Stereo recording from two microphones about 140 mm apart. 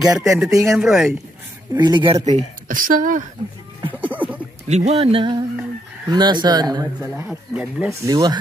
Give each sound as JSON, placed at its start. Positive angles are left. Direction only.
{"t": 0.0, "sound": "speech", "side_deg": -25}
{"t": 0.6, "sound": "speech", "side_deg": 0}
{"t": 1.7, "sound": "speech", "side_deg": -30}
{"t": 2.7, "sound": "a woman's voice", "side_deg": -75}
{"t": 3.8, "sound": "a sound", "side_deg": -10}
{"t": 4.6, "sound": "speech", "side_deg": -55}
{"t": 7.0, "sound": "speech", "side_deg": -15}
{"t": 8.1, "sound": "speech", "side_deg": -30}